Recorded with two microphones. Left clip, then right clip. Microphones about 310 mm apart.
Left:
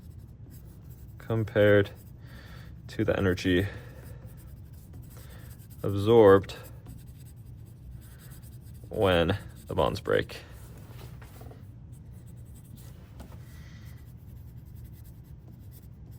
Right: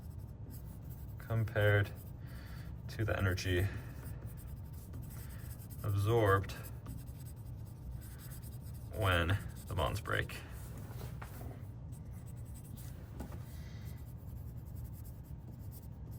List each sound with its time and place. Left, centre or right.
1.2 s speech: centre
2.3 s a sound: centre
6.0 s speech: centre
9.0 s speech: centre
10.8 s music: centre
12.7 s writing: centre